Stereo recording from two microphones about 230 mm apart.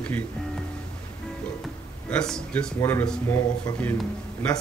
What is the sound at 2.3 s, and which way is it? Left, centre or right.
Speech, centre.